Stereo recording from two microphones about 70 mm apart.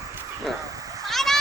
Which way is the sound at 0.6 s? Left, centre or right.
Right.